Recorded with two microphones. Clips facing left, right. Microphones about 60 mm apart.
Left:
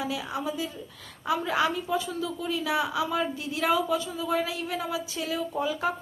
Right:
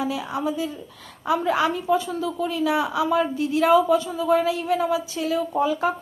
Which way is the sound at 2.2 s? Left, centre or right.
Centre.